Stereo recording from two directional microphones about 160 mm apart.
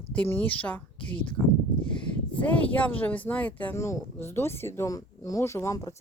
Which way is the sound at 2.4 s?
10° left (ahead or behind).